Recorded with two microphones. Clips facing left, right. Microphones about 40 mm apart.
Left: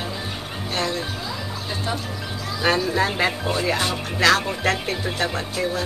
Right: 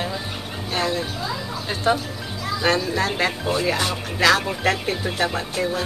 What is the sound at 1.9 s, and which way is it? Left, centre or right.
Speech, right.